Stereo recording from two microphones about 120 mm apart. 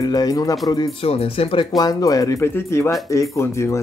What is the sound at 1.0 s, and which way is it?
Speech, 55° left (ahead or behind).